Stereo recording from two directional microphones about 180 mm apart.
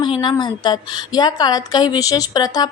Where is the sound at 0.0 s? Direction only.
25° left (ahead or behind).